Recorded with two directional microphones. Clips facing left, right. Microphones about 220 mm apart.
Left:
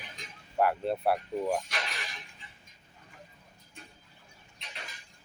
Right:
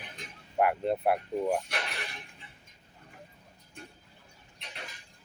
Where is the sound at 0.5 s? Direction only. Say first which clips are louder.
Right 1 dB; 15° right (ahead or behind).